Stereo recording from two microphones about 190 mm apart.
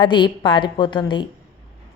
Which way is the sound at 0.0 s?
25° left (ahead or behind).